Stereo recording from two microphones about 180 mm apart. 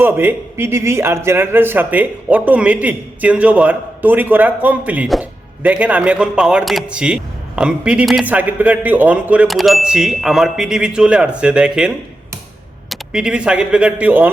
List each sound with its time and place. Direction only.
0.0 s a man's voice: 10° right (ahead or behind)